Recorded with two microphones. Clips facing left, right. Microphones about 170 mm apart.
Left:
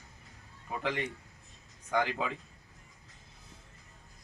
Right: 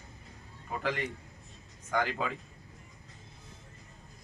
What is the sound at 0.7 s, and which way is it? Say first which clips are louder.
A man's voice: right 1 dB; 20° left (ahead or behind).